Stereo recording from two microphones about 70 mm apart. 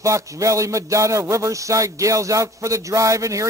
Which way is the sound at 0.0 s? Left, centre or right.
Right.